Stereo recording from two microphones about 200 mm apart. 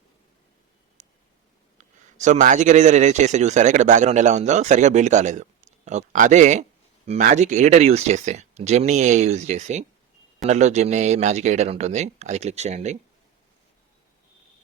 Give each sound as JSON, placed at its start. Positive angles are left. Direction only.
{"t": 1.0, "sound": "tick", "side_deg": -35}
{"t": 1.8, "sound": "a man's voice", "side_deg": -35}